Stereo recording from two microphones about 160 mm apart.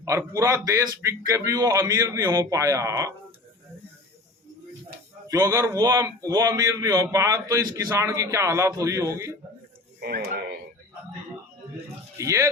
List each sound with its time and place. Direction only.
0.0 s speech: 20° right (ahead or behind)
5.3 s speech: 20° right (ahead or behind)
10.0 s speech: 75° right (ahead or behind)
12.1 s speech: 20° right (ahead or behind)